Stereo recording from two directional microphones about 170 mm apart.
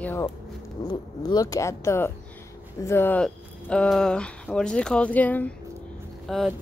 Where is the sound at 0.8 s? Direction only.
25° left (ahead or behind).